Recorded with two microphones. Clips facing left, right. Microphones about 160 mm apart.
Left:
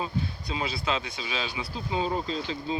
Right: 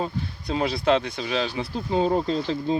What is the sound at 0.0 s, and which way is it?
Speech, 55° right (ahead or behind).